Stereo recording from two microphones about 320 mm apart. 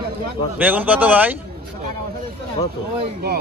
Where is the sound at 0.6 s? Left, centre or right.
Centre.